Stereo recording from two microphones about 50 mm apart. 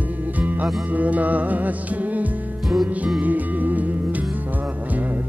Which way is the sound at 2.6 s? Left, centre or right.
Centre.